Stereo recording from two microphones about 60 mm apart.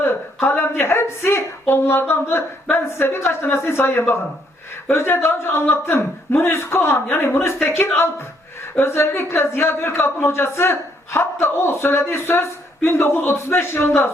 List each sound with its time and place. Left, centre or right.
0.4 s a woman's voice: left